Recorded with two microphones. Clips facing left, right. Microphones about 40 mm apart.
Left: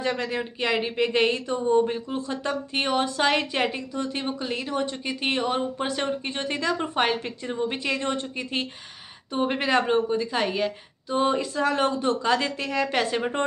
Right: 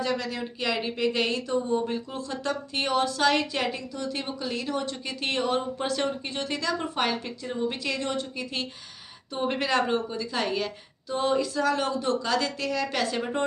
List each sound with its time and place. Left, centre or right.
0.0 s speech: left